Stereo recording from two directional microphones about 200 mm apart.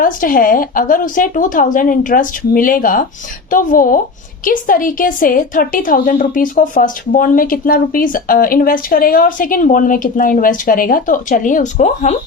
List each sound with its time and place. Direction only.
0.0 s a woman's voice: 45° left (ahead or behind)